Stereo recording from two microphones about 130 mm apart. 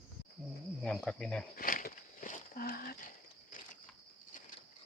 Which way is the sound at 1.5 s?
90° left.